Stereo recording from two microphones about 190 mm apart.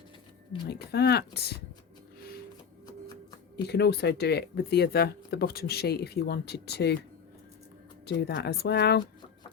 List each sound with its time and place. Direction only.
0.7 s speech: 60° left (ahead or behind)
3.6 s speech: 60° left (ahead or behind)
8.0 s speech: 60° left (ahead or behind)